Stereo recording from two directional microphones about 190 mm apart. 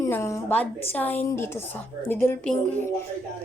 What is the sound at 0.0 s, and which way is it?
A woman's voice, 15° left (ahead or behind).